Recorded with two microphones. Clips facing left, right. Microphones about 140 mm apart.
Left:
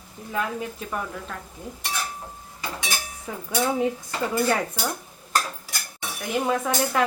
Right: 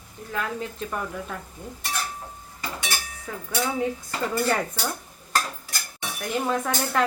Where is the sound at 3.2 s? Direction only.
15° left (ahead or behind).